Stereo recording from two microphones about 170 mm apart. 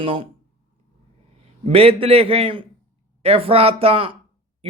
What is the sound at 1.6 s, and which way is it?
A man's voice, 35° right (ahead or behind).